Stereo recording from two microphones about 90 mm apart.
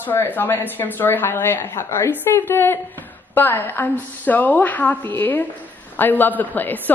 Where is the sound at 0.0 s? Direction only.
20° left (ahead or behind).